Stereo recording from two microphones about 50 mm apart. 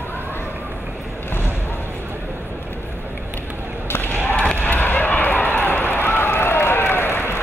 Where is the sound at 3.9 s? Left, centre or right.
Left.